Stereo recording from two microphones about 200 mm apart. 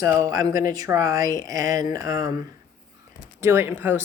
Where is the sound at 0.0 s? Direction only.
15° right (ahead or behind).